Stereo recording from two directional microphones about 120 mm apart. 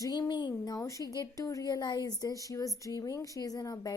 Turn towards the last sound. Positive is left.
turn(degrees=30)  # may be behind; listen again after turning